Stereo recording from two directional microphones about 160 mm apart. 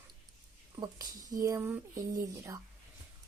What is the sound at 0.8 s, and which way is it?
Speech, 25° right (ahead or behind).